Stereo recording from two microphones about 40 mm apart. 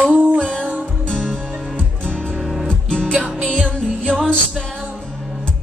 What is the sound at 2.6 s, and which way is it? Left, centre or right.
Music, left.